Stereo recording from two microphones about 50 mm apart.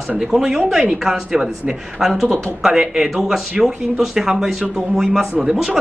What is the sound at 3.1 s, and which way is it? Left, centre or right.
Speech, centre.